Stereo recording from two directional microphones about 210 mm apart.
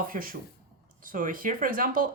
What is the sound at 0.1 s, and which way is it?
Speech, 40° right (ahead or behind).